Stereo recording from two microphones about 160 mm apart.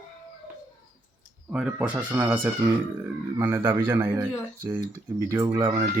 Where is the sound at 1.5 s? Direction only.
5° right (ahead or behind).